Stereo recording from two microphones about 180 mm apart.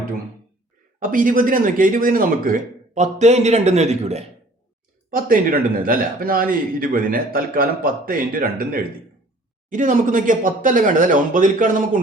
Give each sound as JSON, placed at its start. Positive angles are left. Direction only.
{"t": 0.9, "sound": "a man's voice", "side_deg": -50}
{"t": 5.1, "sound": "a man's voice", "side_deg": -50}